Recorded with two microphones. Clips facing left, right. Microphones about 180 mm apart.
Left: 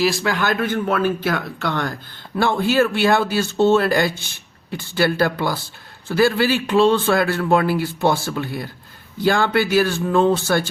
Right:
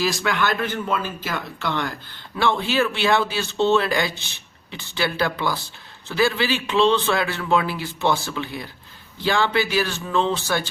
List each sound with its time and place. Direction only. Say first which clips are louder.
0.0 s a man's voice: left 3 dB; 30° left (ahead or behind); by 10.6 s 50° left (ahead or behind)